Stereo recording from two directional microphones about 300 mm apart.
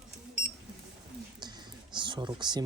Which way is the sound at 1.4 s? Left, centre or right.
Centre.